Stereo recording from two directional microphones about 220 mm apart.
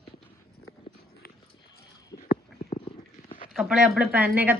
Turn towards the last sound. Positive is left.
turn(degrees=-10)  # may be behind; listen again after turning